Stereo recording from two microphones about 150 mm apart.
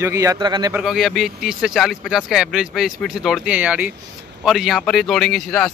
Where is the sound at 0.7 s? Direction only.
5° right (ahead or behind).